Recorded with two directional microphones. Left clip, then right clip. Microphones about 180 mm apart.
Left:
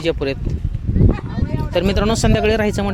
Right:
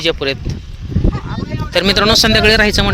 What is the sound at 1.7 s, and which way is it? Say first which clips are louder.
Speech: right 7 dB; centre (ahead or behind).